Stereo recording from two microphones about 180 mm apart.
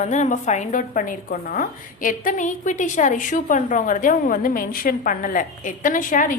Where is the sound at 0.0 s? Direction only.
45° left (ahead or behind).